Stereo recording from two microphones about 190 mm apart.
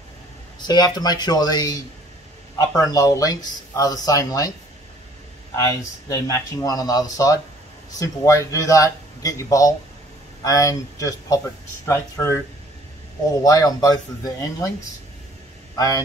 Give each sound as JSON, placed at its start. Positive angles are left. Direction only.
{"t": 0.6, "sound": "speech", "side_deg": 20}
{"t": 5.7, "sound": "speech", "side_deg": 15}
{"t": 13.4, "sound": "speech", "side_deg": 20}
{"t": 15.7, "sound": "a man's voice", "side_deg": 20}